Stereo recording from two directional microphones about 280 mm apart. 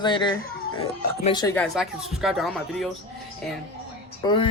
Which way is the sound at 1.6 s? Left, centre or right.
Centre.